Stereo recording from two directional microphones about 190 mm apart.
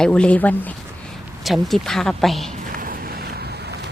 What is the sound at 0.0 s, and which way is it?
Speech, 5° left (ahead or behind).